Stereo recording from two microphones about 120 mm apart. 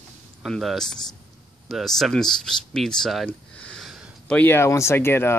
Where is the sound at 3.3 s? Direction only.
10° left (ahead or behind).